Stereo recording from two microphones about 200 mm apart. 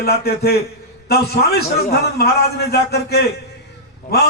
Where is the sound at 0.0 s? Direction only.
50° left (ahead or behind).